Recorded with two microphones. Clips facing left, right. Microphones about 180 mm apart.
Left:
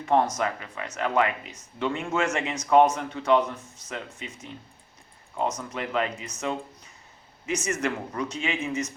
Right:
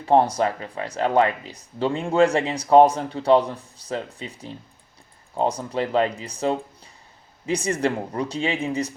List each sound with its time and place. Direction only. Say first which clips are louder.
0.0 s speech: right 5 dB; 30° right (ahead or behind)